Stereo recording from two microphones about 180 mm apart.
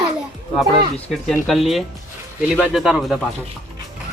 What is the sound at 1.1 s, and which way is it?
Speech, centre (ahead or behind).